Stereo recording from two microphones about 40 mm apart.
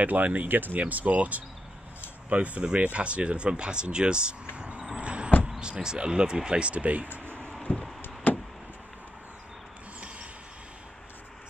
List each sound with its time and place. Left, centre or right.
0.0 s speech: right
4.6 s vehicle: right
4.9 s a sound: right
5.6 s speech: centre; by 7.1 s right
7.7 s knock: left
8.3 s vehicle: left